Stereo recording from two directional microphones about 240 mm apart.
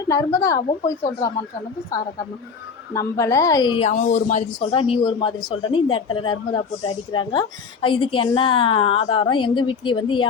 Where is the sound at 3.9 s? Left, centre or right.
Left.